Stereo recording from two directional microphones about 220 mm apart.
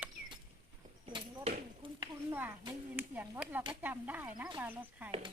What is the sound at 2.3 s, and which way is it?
Speech, 10° right (ahead or behind).